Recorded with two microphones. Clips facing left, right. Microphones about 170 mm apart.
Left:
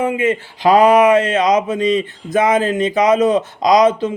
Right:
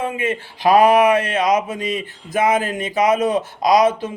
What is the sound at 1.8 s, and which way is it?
Speech, 10° right (ahead or behind).